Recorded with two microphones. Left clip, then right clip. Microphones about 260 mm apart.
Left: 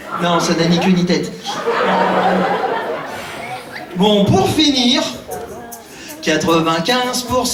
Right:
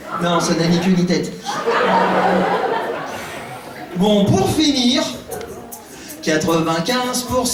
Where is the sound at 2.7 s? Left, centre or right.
Centre.